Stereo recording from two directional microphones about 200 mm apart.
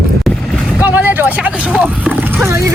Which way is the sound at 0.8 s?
10° right (ahead or behind).